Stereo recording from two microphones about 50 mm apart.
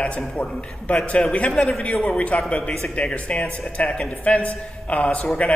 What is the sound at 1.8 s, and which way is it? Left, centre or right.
A man's voice, left.